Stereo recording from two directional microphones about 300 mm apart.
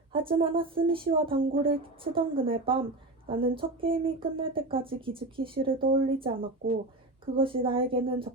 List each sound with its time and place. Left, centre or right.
0.1 s speech: centre